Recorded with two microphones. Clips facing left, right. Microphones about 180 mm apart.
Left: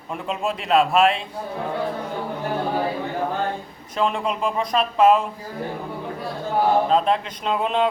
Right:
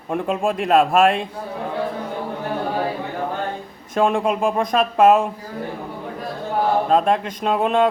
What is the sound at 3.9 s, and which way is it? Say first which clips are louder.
Speech: right 5 dB; 50° right (ahead or behind).